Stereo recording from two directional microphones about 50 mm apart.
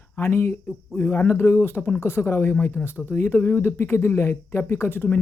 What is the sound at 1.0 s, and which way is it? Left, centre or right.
Speech, left.